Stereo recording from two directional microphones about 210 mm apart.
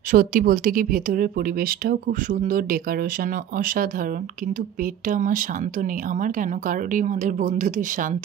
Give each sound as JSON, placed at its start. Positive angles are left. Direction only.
{"t": 0.1, "sound": "speech", "side_deg": -40}
{"t": 5.0, "sound": "speech", "side_deg": -40}